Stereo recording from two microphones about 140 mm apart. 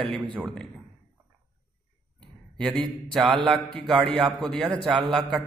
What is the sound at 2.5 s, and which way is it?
A man's voice, 5° left (ahead or behind).